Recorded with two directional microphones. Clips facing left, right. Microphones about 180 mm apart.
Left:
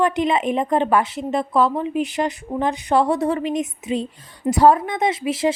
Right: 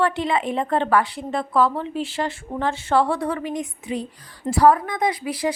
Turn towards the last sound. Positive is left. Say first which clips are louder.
# left 3 dB
turn(degrees=25)  # may be behind; listen again after turning